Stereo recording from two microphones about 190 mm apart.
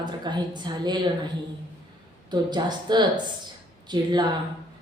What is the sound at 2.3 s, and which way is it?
A woman's voice, 20° right (ahead or behind).